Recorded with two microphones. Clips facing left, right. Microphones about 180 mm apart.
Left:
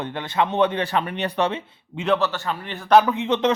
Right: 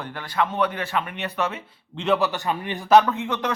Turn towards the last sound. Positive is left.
turn(degrees=20)  # may be behind; listen again after turning